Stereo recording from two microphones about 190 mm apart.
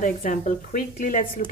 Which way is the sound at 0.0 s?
45° left (ahead or behind).